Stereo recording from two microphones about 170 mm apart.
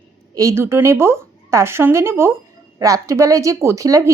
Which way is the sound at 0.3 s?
15° right (ahead or behind).